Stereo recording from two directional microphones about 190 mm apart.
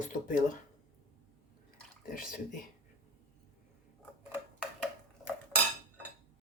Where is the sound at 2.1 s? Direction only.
50° left (ahead or behind).